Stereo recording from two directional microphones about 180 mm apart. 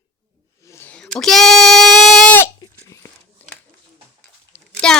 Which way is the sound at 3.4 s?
10° left (ahead or behind).